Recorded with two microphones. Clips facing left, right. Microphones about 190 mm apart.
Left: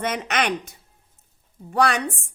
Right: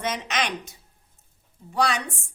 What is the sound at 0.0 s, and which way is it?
A woman's voice, 60° left (ahead or behind).